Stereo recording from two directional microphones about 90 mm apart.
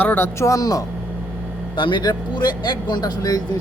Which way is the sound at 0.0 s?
25° left (ahead or behind).